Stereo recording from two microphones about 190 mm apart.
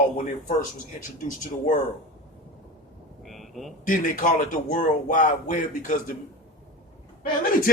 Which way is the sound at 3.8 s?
45° left (ahead or behind).